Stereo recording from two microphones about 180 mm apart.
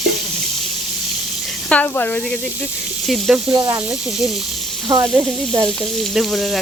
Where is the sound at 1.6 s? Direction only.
10° left (ahead or behind).